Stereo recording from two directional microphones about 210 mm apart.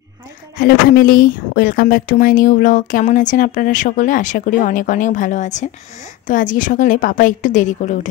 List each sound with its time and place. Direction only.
0.6 s speech: 45° left (ahead or behind)